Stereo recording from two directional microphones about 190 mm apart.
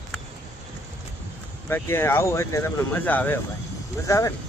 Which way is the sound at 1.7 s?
10° left (ahead or behind).